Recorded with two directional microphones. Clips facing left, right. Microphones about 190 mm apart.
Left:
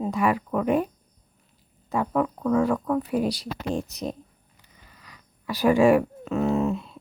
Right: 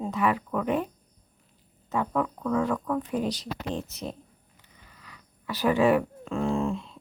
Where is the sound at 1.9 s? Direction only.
15° left (ahead or behind).